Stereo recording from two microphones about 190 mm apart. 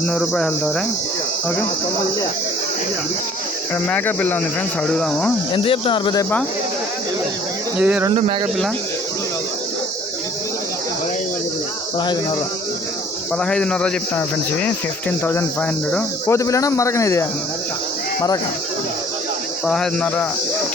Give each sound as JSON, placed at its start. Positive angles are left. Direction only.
{"t": 0.1, "sound": "speech", "side_deg": 5}
{"t": 3.8, "sound": "speech", "side_deg": 5}
{"t": 5.5, "sound": "speech", "side_deg": 30}
{"t": 7.8, "sound": "speech", "side_deg": -5}
{"t": 8.1, "sound": "speech", "side_deg": -30}
{"t": 13.3, "sound": "speech", "side_deg": 5}
{"t": 19.6, "sound": "speech", "side_deg": 0}